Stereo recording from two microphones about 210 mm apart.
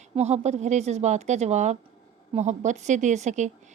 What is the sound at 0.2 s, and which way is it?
Speech, 30° right (ahead or behind).